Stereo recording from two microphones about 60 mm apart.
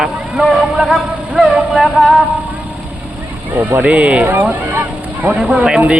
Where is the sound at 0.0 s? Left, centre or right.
Centre.